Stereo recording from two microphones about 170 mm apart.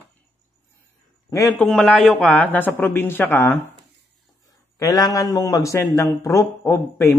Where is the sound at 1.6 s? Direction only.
5° left (ahead or behind).